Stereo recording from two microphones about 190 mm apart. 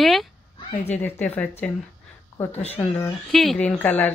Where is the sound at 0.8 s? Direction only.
10° left (ahead or behind).